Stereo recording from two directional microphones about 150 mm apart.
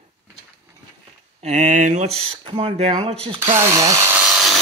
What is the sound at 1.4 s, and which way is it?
Speech, 55° right (ahead or behind).